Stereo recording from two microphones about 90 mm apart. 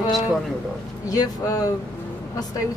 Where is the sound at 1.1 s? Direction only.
40° left (ahead or behind).